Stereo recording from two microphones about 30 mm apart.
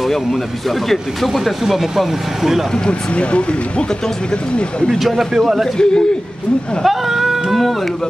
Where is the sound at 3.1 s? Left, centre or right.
Left.